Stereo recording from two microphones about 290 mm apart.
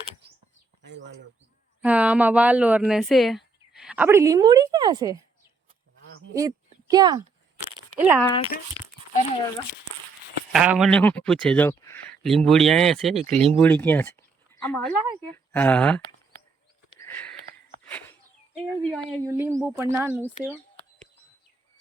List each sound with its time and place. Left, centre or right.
1.8 s speech: centre
6.3 s a woman's voice: centre
8.2 s speech: centre
10.5 s speech: centre
14.9 s speech: left
15.5 s speech: centre
17.0 s a sound: centre
17.8 s bird: centre
18.7 s speech: centre
19.2 s speech: centre